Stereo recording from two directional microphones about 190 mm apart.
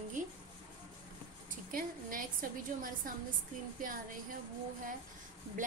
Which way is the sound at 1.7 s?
45° right (ahead or behind).